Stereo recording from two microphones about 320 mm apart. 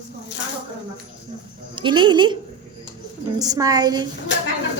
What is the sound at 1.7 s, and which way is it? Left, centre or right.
Speech, centre.